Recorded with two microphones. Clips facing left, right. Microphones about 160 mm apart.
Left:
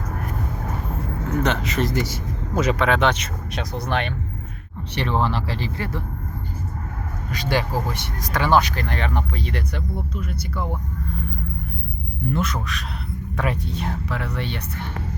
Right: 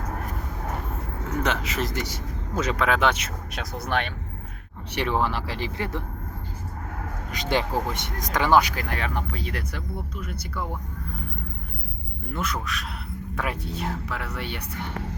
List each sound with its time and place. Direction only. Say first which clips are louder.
1.5 s speech: left 3 dB; 5° right (ahead or behind)
2.6 s speech: left 5 dB; 10° left (ahead or behind)
2.8 s speech: left 3 dB; 5° right (ahead or behind)
4.9 s speech: left 2 dB; 10° right (ahead or behind)
7.3 s speech: left 1 dB; 20° right (ahead or behind); by 10.8 s centre (ahead or behind)
12.3 s speech: left 4 dB; centre (ahead or behind)